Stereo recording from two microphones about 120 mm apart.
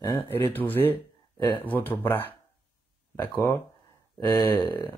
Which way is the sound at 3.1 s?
20° left (ahead or behind).